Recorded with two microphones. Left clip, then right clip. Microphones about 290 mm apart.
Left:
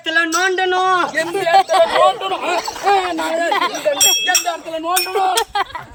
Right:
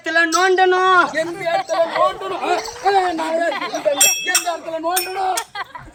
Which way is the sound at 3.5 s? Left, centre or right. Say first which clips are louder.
Left 5 dB; left.